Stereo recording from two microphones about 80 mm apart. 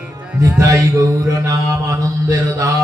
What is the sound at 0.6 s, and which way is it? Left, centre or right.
A man's voice, right.